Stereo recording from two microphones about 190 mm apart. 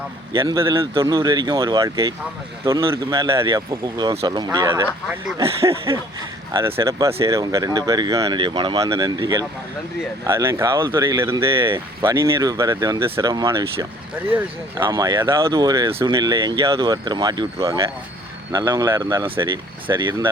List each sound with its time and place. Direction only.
0.3 s speech: 25° right (ahead or behind)